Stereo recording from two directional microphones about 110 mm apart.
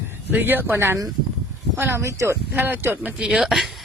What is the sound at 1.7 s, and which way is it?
Speech, 20° right (ahead or behind).